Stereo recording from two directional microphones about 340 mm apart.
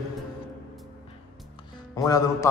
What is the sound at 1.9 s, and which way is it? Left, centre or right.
Speech, centre.